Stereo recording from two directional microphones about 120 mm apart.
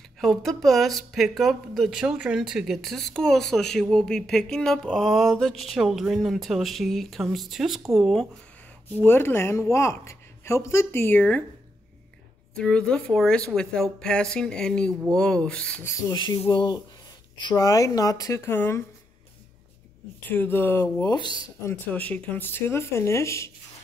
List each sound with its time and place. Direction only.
0.2 s speech: centre (ahead or behind)
9.0 s a woman's voice: 20° left (ahead or behind)
12.5 s speech: 5° left (ahead or behind)
15.8 s a woman's voice: 25° left (ahead or behind)
16.5 s a woman's voice: 40° left (ahead or behind); by 18.9 s 20° left (ahead or behind)
20.2 s speech: 15° left (ahead or behind)
21.1 s speech: 35° left (ahead or behind)
21.6 s a woman's voice: 15° left (ahead or behind)